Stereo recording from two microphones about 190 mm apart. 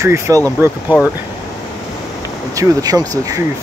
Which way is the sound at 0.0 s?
15° right (ahead or behind).